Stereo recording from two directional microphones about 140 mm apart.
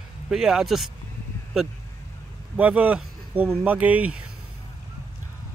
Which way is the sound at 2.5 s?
10° right (ahead or behind).